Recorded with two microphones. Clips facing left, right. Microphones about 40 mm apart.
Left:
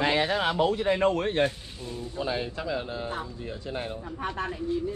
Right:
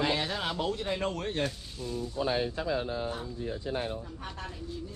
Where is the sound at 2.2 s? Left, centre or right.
Left.